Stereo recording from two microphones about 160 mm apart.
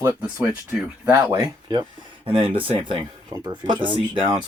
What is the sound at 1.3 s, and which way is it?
Speech, 25° right (ahead or behind).